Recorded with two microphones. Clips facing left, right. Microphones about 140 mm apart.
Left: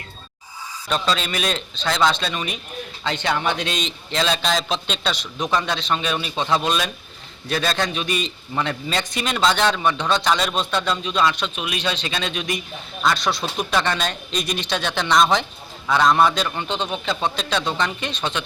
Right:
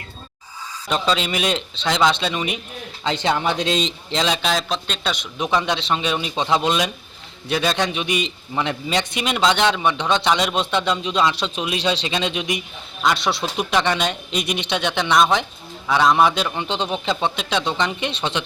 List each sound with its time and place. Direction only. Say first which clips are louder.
0.9 s speech: right 2 dB; 20° right (ahead or behind)
3.2 s speech: right 2 dB; 30° right (ahead or behind)
4.1 s speech: even; 20° right (ahead or behind)
4.4 s a man's voice: even; centre (ahead or behind)
5.4 s a man's voice: right 2 dB; 15° right (ahead or behind)